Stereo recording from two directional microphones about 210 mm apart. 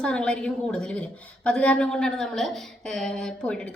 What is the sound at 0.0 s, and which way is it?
A woman's voice, 5° left (ahead or behind).